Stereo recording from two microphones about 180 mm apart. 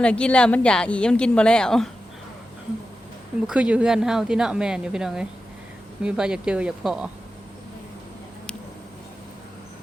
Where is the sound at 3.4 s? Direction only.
5° right (ahead or behind).